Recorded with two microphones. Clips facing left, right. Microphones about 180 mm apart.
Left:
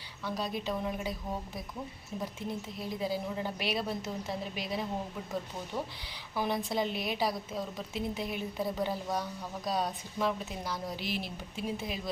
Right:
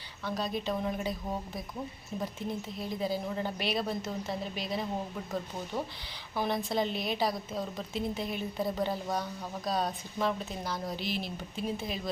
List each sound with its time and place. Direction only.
0.3 s a woman's voice: 10° left (ahead or behind)
2.5 s a woman's voice: 5° left (ahead or behind)
6.3 s a woman's voice: 10° left (ahead or behind)